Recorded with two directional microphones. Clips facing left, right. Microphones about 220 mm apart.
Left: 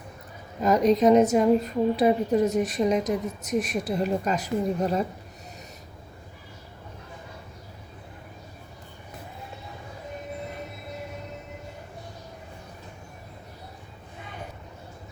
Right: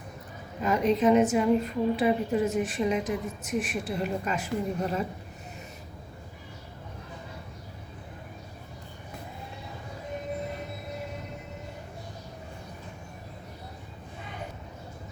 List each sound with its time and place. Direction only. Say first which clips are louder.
0.6 s a woman's voice: left 4 dB; 40° left (ahead or behind)